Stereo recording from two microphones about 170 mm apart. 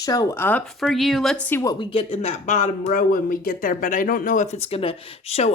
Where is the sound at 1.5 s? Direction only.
20° left (ahead or behind).